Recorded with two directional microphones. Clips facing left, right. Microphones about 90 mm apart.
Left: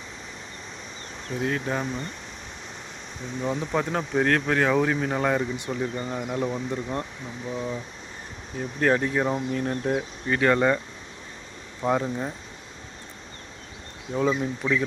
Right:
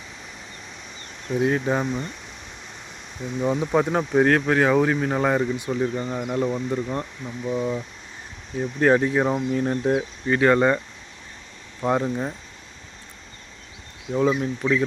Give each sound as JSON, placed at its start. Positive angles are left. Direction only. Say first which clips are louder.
{"t": 1.5, "sound": "speech", "louder": "right 4 dB", "side_deg": -15}
{"t": 1.8, "sound": "speech", "louder": "right 4 dB", "side_deg": -5}
{"t": 3.4, "sound": "speech", "louder": "right 5 dB", "side_deg": -10}
{"t": 8.8, "sound": "speech", "louder": "right 4 dB", "side_deg": -10}
{"t": 11.8, "sound": "speech", "louder": "right 2 dB", "side_deg": -5}
{"t": 14.1, "sound": "speech", "louder": "right 3 dB", "side_deg": -5}